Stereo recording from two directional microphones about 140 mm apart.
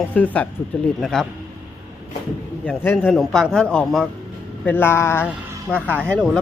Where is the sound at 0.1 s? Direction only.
10° left (ahead or behind).